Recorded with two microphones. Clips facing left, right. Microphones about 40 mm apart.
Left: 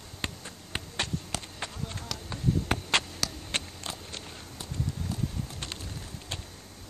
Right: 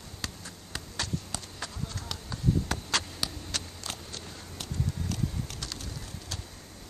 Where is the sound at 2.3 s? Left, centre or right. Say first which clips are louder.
Left 1 dB; left.